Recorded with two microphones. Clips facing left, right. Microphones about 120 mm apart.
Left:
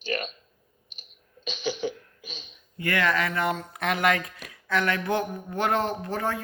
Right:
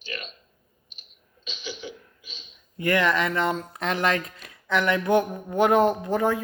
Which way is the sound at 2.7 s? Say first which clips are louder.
Right 3 dB; 20° right (ahead or behind).